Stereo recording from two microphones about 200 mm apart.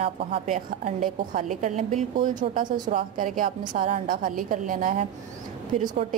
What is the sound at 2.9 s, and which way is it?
A woman's voice, 45° right (ahead or behind).